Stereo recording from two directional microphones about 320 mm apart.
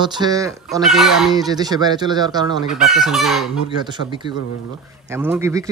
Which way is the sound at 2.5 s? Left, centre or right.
Centre.